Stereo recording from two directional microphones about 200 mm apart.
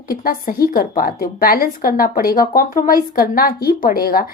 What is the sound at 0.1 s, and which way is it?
A woman's voice, 45° left (ahead or behind).